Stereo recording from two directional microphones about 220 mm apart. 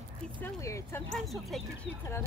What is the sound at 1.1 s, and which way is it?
Speech, centre (ahead or behind).